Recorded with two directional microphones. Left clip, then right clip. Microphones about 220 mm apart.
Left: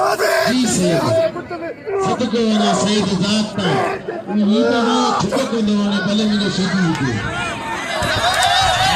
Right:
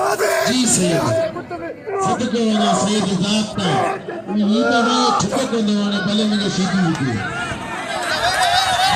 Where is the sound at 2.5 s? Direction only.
Centre (ahead or behind).